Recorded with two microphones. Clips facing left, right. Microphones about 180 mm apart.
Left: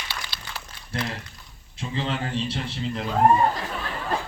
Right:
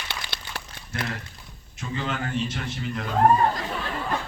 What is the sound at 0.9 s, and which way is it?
A man's voice, 30° left (ahead or behind).